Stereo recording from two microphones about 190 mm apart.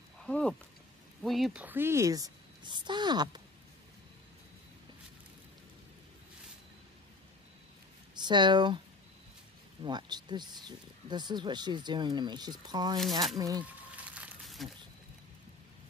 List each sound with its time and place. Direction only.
0.2 s a woman's voice: 5° left (ahead or behind); by 3.4 s 20° right (ahead or behind)
8.2 s speech: 25° right (ahead or behind)
9.8 s speech: 20° right (ahead or behind)
13.9 s crumpling: 5° right (ahead or behind)